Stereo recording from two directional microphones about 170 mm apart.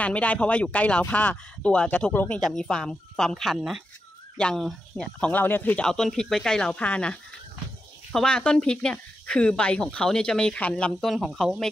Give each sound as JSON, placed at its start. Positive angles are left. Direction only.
{"t": 0.0, "sound": "speech", "side_deg": 10}